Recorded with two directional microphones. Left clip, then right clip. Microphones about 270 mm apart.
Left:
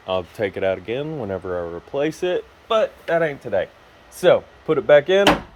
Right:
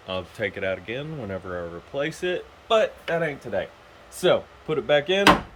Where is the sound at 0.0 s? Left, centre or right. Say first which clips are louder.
Left 6 dB; centre.